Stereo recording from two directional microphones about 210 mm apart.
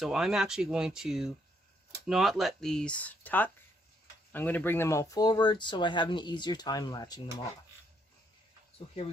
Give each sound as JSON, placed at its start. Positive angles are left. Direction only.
{"t": 0.0, "sound": "speech", "side_deg": 0}